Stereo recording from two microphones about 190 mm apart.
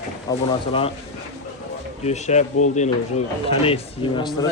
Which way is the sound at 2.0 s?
35° left (ahead or behind).